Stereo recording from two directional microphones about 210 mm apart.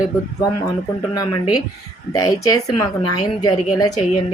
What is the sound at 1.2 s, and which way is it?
A woman's voice, 20° left (ahead or behind).